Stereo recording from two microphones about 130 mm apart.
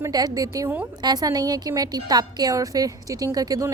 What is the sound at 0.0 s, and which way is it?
A woman's voice, 30° right (ahead or behind).